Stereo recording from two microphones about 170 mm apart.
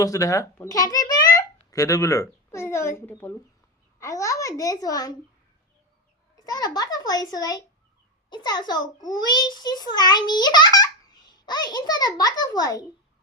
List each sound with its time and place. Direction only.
0.0 s a child's voice: 20° left (ahead or behind)
6.4 s a child's voice: 20° left (ahead or behind)